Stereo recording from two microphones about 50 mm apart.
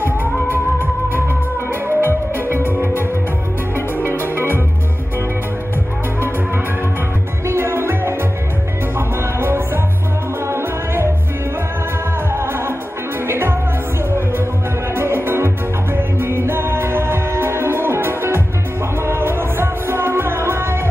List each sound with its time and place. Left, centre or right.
0.0 s music: left
7.4 s music: right
12.3 s music: right
15.0 s music: right